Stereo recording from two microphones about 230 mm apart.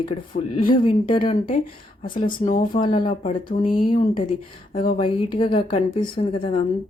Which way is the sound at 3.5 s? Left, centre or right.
Left.